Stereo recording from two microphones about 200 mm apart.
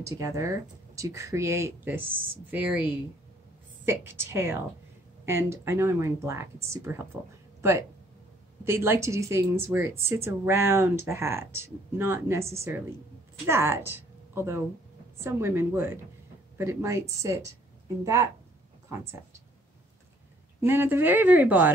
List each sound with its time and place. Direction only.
0.0 s speech: 15° right (ahead or behind)
8.6 s speech: 10° right (ahead or behind)
13.5 s speech: 10° right (ahead or behind)
20.6 s speech: 10° right (ahead or behind)